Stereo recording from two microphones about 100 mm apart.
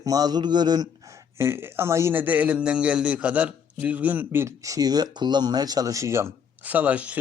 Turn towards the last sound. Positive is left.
turn(degrees=-15)  # may be behind; listen again after turning